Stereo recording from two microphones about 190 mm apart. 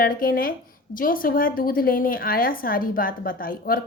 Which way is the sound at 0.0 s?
50° left (ahead or behind).